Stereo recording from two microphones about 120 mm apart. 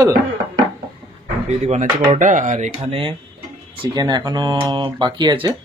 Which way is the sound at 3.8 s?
35° right (ahead or behind).